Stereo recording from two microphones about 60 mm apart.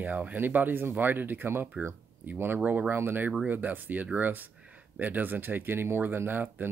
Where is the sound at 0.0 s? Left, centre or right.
Right.